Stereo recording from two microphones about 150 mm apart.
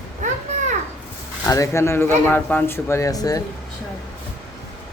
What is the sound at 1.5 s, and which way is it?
Speech, 20° left (ahead or behind).